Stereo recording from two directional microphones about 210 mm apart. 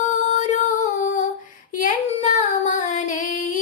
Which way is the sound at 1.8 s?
40° left (ahead or behind).